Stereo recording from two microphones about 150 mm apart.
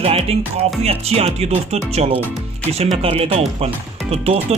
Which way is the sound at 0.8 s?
45° right (ahead or behind).